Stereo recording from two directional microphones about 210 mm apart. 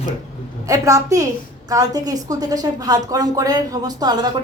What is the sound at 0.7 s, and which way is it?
A woman's voice, 15° right (ahead or behind).